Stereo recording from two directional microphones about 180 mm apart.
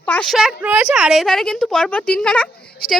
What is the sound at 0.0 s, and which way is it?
A woman's voice, 5° left (ahead or behind).